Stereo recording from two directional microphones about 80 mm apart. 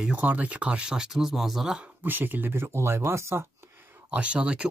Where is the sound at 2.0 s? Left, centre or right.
Right.